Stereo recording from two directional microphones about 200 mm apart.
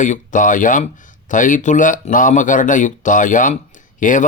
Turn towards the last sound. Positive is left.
turn(degrees=40)  # may be behind; listen again after turning